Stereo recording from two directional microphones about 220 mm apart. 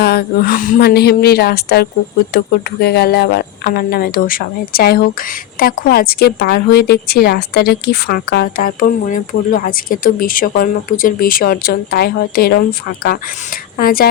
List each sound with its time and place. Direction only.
0.0 s a woman's voice: 45° left (ahead or behind)